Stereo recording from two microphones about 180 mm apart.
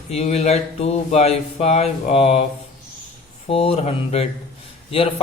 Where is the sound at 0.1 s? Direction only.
35° left (ahead or behind).